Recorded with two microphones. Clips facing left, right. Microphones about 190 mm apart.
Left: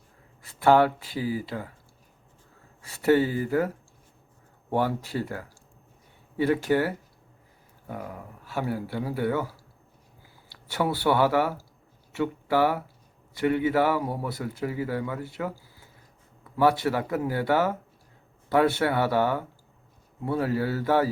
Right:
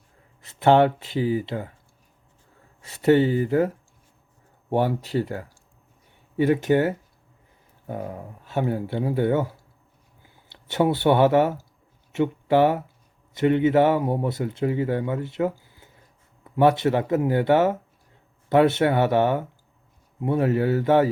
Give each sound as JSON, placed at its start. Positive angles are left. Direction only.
{"t": 0.4, "sound": "speech", "side_deg": -20}
{"t": 2.8, "sound": "speech", "side_deg": -20}
{"t": 4.7, "sound": "speech", "side_deg": -20}